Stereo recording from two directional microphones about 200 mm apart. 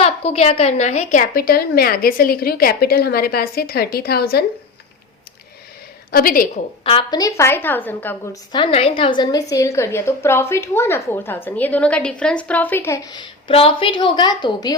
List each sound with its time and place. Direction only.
0.0 s a woman's voice: 30° left (ahead or behind); by 4.4 s 50° left (ahead or behind)
6.1 s a woman's voice: 45° left (ahead or behind)
6.8 s a woman's voice: 25° left (ahead or behind)
8.5 s a woman's voice: 25° left (ahead or behind)